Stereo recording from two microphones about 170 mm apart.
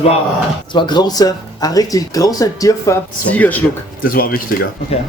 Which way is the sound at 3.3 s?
10° left (ahead or behind).